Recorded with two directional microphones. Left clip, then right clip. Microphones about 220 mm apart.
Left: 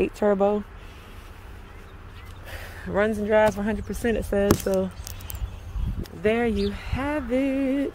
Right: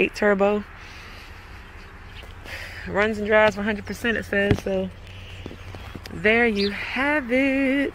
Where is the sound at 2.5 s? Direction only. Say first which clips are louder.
Right 1 dB; 25° left (ahead or behind).